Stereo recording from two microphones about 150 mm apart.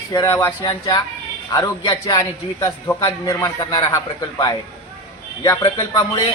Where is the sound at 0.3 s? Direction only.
20° left (ahead or behind).